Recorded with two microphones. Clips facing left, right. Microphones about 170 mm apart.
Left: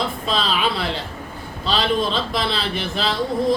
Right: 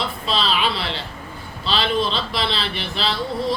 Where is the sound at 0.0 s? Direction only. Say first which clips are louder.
Left 1 dB; 45° left (ahead or behind).